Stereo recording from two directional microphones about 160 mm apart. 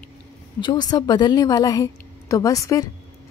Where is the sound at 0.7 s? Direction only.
25° left (ahead or behind).